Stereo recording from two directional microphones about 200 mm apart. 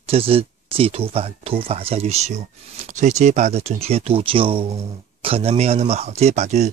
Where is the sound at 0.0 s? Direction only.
30° right (ahead or behind).